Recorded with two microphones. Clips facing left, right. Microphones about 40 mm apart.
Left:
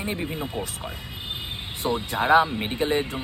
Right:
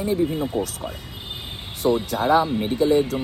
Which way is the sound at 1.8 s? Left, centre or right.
Left.